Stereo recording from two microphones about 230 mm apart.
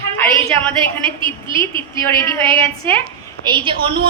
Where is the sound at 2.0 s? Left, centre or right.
Centre.